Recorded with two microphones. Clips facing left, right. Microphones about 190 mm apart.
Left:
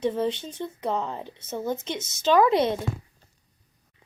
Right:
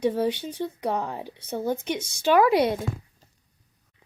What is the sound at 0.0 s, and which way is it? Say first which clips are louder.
Speech: right 2 dB; 10° right (ahead or behind).